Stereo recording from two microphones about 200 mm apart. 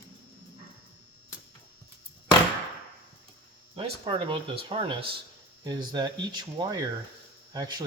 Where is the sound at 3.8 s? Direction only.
25° right (ahead or behind).